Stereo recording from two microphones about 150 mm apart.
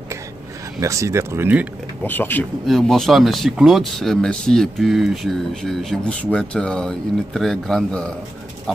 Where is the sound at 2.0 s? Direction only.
10° left (ahead or behind).